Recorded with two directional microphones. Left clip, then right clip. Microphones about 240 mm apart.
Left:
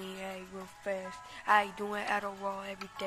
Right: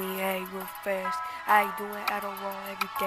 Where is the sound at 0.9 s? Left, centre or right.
Centre.